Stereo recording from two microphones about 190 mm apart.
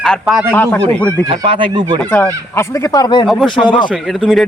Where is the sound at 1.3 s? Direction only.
25° right (ahead or behind).